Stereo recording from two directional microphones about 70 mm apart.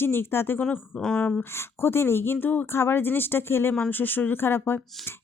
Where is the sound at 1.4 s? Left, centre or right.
Left.